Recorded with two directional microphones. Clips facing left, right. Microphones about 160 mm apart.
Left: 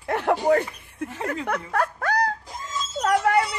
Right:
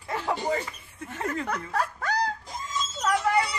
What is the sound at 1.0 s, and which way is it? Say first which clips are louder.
Speech: left 8 dB; 55° left (ahead or behind).